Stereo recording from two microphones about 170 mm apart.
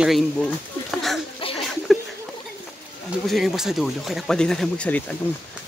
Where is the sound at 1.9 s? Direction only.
Centre (ahead or behind).